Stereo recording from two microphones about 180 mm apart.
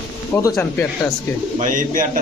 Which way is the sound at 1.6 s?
45° right (ahead or behind).